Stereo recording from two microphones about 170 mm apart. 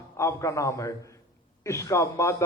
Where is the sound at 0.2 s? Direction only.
15° left (ahead or behind).